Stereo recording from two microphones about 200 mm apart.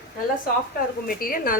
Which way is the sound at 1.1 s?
45° left (ahead or behind).